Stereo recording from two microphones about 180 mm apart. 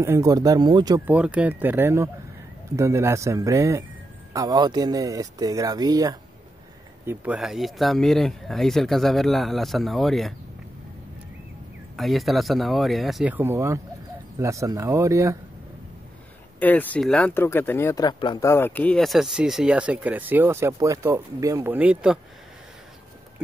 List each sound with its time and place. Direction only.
0.0 s speech: 15° right (ahead or behind)
1.0 s speech: 5° right (ahead or behind)
7.1 s speech: 5° right (ahead or behind)
12.0 s speech: centre (ahead or behind); by 15.3 s 15° right (ahead or behind)
16.5 s speech: 10° left (ahead or behind)